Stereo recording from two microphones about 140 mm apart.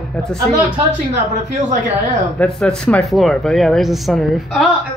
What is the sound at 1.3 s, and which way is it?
Speech, 60° right (ahead or behind).